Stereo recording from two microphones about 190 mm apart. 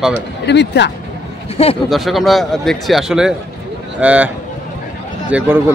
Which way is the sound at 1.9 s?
Centre (ahead or behind).